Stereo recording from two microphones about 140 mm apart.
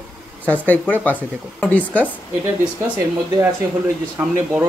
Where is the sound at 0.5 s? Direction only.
10° left (ahead or behind).